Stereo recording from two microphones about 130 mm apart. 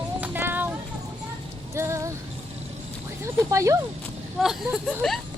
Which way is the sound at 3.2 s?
20° right (ahead or behind).